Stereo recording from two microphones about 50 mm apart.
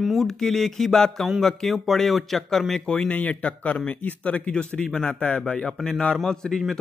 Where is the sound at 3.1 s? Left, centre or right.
Left.